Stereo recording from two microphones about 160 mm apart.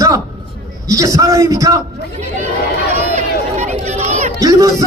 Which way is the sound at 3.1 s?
45° right (ahead or behind).